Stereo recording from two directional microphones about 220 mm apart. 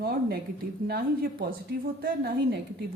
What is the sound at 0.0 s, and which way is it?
A woman's voice, 45° right (ahead or behind).